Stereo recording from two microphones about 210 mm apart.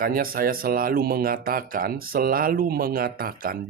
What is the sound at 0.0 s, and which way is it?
Speech, 45° right (ahead or behind).